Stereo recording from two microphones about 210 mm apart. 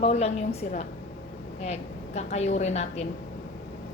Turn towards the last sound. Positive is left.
turn(degrees=30)  # may be behind; listen again after turning